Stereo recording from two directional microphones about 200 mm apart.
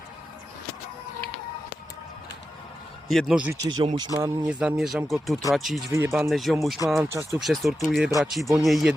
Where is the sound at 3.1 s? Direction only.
Centre (ahead or behind).